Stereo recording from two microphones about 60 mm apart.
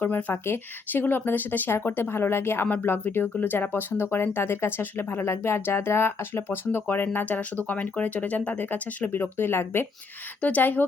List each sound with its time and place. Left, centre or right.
0.0 s speech: left
10.4 s speech: left